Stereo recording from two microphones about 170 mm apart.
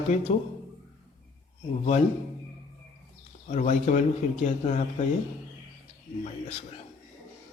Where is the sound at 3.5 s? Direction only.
45° left (ahead or behind).